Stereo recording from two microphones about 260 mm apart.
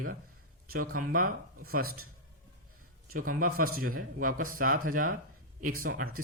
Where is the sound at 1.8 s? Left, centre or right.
Right.